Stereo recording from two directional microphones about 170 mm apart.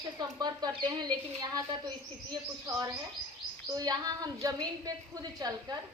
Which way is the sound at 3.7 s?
20° right (ahead or behind).